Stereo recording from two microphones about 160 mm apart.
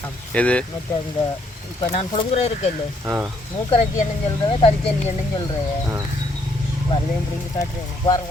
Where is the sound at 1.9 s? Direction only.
40° left (ahead or behind).